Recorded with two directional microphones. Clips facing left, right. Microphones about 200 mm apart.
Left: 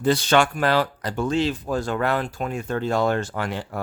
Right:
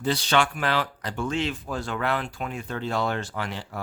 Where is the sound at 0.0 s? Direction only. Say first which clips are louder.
Left 5 dB; 50° left (ahead or behind).